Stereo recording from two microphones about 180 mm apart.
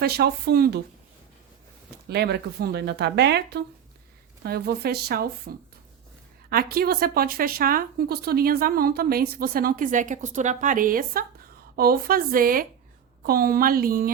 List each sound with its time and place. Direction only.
0.0 s speech: 60° right (ahead or behind)
2.0 s speech: 65° right (ahead or behind)